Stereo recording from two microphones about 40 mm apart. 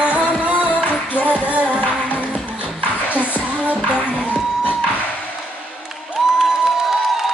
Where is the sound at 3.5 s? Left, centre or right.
Right.